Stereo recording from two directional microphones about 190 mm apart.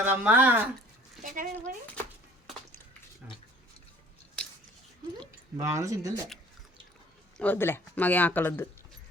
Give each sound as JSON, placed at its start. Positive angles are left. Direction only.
{"t": 0.0, "sound": "speech", "side_deg": -10}
{"t": 1.2, "sound": "a sound", "side_deg": -45}
{"t": 4.4, "sound": "scissors", "side_deg": 5}
{"t": 5.5, "sound": "speech", "side_deg": -15}
{"t": 7.3, "sound": "speech", "side_deg": 10}